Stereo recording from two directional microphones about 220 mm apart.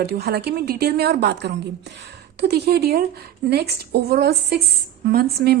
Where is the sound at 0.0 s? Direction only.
45° right (ahead or behind).